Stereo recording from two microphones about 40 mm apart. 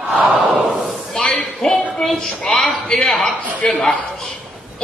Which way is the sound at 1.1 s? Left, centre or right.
Centre.